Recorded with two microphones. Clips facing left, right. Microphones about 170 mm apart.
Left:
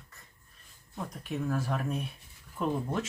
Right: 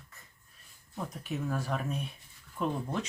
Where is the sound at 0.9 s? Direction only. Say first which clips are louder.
Even; centre (ahead or behind).